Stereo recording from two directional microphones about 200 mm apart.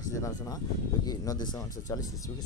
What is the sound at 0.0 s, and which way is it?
Speech, 15° left (ahead or behind).